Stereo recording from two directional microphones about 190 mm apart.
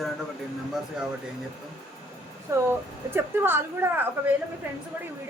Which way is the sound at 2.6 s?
10° right (ahead or behind).